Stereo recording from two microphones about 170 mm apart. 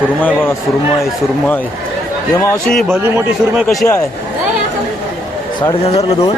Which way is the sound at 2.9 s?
10° right (ahead or behind).